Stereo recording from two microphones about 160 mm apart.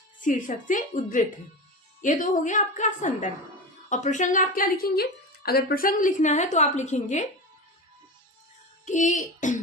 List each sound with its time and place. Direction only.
0.2 s a woman's voice: 55° left (ahead or behind)
8.8 s a woman's voice: 50° left (ahead or behind)